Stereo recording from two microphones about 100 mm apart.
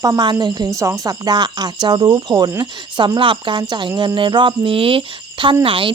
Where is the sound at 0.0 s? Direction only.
40° right (ahead or behind).